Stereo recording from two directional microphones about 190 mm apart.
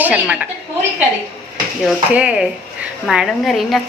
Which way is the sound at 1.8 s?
5° right (ahead or behind).